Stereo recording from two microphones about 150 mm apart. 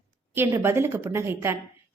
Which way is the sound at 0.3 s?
15° right (ahead or behind).